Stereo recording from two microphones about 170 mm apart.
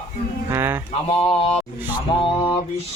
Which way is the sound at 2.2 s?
30° left (ahead or behind).